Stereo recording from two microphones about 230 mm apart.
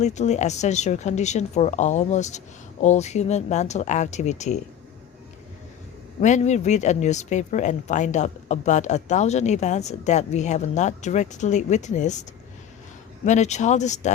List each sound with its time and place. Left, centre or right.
0.0 s speech: left
6.1 s speech: left
13.2 s speech: left